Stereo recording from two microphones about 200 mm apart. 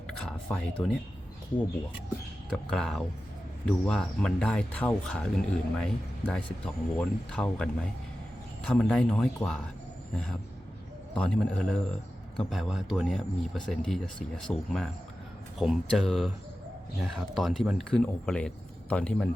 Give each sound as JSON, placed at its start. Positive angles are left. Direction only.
{"t": 0.3, "sound": "speech", "side_deg": 0}
{"t": 2.5, "sound": "speech", "side_deg": 5}
{"t": 11.1, "sound": "speech", "side_deg": 5}